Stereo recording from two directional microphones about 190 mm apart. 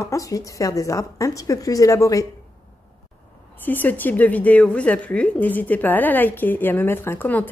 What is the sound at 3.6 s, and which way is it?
A woman's voice, 10° left (ahead or behind).